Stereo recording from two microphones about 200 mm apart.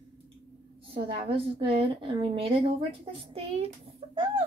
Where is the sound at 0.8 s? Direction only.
25° right (ahead or behind).